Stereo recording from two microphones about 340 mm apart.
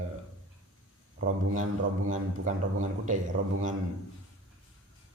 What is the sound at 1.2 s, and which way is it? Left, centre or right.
Speech, right.